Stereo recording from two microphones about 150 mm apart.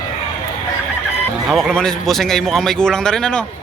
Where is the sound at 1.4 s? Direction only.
5° left (ahead or behind).